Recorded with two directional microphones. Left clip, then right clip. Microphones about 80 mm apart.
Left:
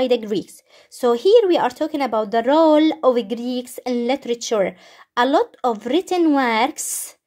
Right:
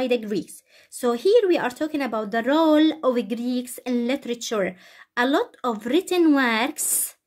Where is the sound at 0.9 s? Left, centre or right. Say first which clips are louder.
Left 5 dB; left.